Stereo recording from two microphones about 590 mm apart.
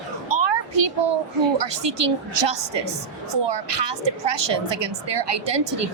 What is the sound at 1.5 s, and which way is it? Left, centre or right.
A woman's voice, right.